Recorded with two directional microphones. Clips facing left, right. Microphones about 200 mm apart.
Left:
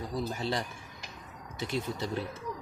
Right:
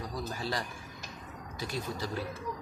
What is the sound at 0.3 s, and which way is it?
Speech, 25° left (ahead or behind).